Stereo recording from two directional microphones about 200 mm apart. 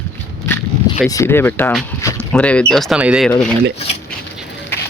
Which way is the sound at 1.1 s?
10° left (ahead or behind).